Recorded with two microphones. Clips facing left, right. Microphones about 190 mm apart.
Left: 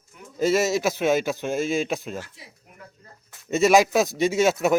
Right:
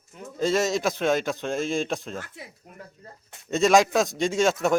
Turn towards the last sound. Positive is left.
turn(degrees=5)  # may be behind; listen again after turning